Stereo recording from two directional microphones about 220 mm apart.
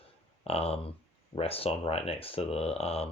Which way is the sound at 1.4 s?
25° left (ahead or behind).